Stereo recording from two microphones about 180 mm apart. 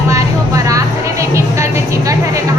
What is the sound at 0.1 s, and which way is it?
Music, 20° right (ahead or behind).